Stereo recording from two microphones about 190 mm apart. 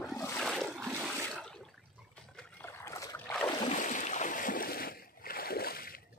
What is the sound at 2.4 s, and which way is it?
Boat, 10° left (ahead or behind).